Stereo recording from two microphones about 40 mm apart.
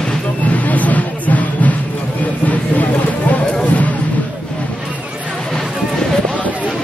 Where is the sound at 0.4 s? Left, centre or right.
Left.